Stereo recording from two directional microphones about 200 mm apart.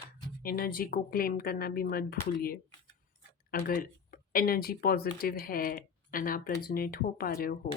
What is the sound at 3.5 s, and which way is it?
Speech, 45° left (ahead or behind).